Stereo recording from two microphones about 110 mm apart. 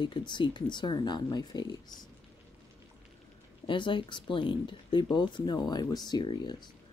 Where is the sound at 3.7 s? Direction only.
45° left (ahead or behind).